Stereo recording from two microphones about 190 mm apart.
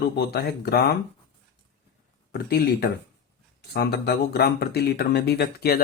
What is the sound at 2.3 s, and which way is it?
Speech, 55° left (ahead or behind).